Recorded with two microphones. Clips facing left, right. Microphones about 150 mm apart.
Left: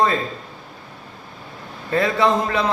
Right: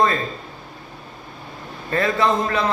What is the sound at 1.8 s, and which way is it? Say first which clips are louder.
Speech: left 1 dB; 15° left (ahead or behind).